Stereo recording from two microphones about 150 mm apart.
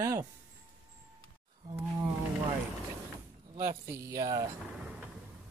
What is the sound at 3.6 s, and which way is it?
Speech, 20° right (ahead or behind).